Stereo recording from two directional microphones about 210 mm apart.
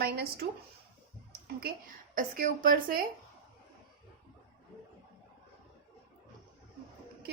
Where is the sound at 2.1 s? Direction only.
40° right (ahead or behind).